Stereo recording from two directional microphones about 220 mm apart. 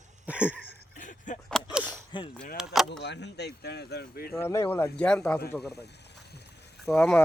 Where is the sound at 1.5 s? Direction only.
5° right (ahead or behind).